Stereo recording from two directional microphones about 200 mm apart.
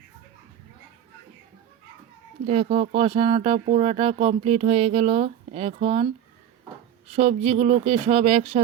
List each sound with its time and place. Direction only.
2.5 s speech: 30° right (ahead or behind)
7.1 s speech: 30° right (ahead or behind)